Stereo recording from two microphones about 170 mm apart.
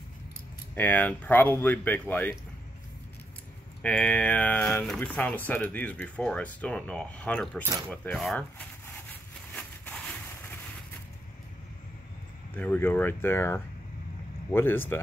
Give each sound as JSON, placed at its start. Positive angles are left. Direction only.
{"t": 0.7, "sound": "speech", "side_deg": 10}
{"t": 3.8, "sound": "speech", "side_deg": 5}
{"t": 7.9, "sound": "a sound", "side_deg": 5}
{"t": 12.5, "sound": "speech", "side_deg": 10}